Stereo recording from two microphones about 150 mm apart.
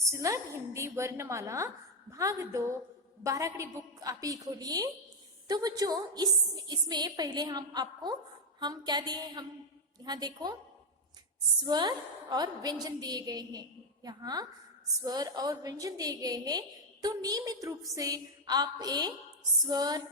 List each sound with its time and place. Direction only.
0.1 s a woman's voice: 20° right (ahead or behind)
11.6 s a woman's voice: 25° right (ahead or behind)